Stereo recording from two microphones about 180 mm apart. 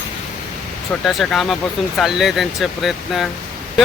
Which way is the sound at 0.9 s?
Centre (ahead or behind).